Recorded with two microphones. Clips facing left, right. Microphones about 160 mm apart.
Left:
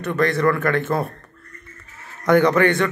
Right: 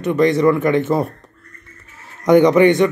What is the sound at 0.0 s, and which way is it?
Speech, 15° right (ahead or behind).